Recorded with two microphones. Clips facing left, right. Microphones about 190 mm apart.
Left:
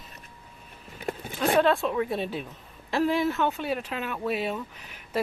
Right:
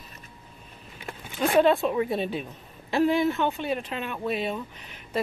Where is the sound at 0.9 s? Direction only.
45° left (ahead or behind).